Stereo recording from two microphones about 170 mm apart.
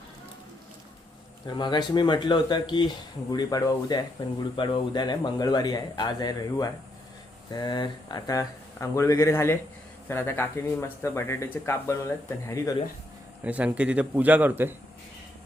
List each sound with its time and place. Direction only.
1.5 s speech: 25° left (ahead or behind)
13.4 s a man's voice: 10° right (ahead or behind)